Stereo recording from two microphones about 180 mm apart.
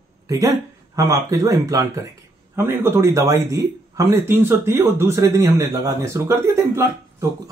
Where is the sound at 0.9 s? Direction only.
20° right (ahead or behind).